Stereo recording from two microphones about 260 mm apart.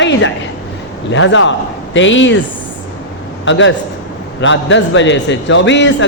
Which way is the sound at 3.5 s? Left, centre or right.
Left.